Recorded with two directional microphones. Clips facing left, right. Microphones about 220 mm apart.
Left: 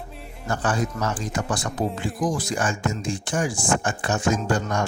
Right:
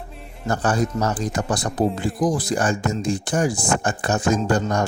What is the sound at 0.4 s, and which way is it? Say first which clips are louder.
Speech: right 4 dB; 40° right (ahead or behind).